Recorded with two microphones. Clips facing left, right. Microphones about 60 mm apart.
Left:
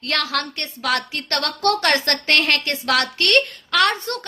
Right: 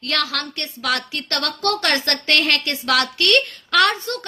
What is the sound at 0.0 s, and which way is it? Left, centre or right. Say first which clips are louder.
A woman's voice: left 1 dB; left.